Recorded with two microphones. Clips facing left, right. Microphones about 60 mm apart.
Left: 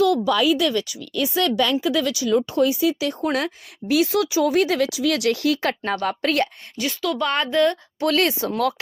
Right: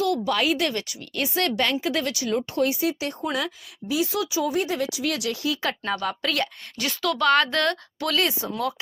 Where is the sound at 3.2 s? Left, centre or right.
Left.